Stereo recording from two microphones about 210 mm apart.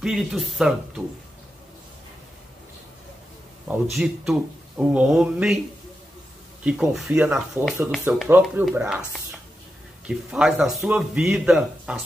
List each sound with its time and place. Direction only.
0.0 s speech: centre (ahead or behind)
3.9 s speech: centre (ahead or behind)
6.6 s speech: 5° right (ahead or behind)